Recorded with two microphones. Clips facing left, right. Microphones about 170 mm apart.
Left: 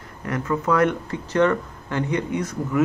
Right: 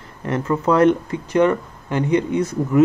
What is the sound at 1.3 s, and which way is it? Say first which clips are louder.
Speech: right 3 dB; 15° right (ahead or behind).